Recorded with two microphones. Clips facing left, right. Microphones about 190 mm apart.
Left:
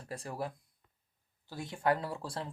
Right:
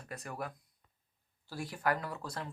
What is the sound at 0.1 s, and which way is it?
Speech, 30° left (ahead or behind).